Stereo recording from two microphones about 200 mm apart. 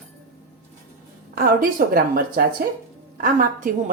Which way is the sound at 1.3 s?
45° right (ahead or behind).